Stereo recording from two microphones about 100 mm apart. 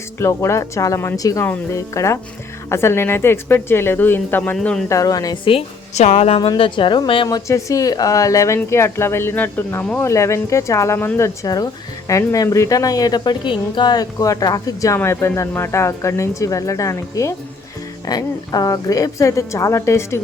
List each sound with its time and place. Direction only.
0.2 s speech: 30° left (ahead or behind)
4.9 s speech: 35° left (ahead or behind)
5.5 s a woman's voice: 80° left
6.6 s a woman's voice: 55° left (ahead or behind)
7.3 s speech: 35° left (ahead or behind)
11.4 s speech: 40° left (ahead or behind)